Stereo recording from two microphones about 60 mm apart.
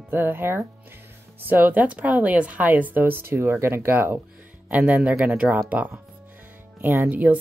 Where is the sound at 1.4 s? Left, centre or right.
Right.